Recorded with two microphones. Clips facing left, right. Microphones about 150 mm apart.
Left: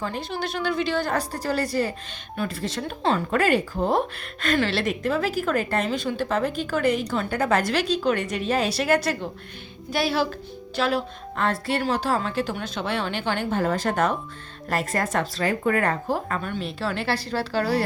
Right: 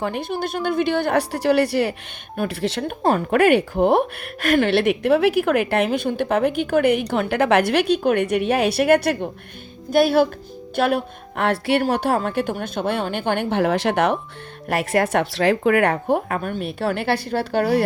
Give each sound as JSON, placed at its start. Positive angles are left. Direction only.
{"t": 0.0, "sound": "a woman's voice", "side_deg": -60}
{"t": 3.0, "sound": "a woman's voice", "side_deg": -50}